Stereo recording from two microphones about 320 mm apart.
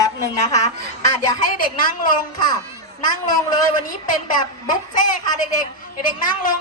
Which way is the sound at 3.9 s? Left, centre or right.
Left.